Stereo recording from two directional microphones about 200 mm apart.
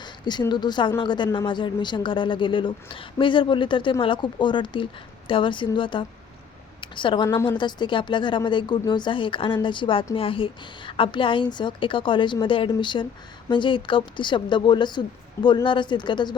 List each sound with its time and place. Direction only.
0.0 s a woman's voice: 20° left (ahead or behind)